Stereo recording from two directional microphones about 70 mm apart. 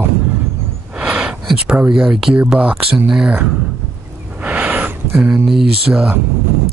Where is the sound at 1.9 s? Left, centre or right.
Centre.